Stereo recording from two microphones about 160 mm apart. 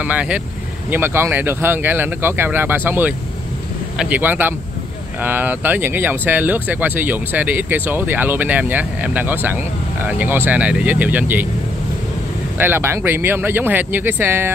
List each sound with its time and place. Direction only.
0.0 s speech: 10° right (ahead or behind)
12.5 s speech: 15° right (ahead or behind)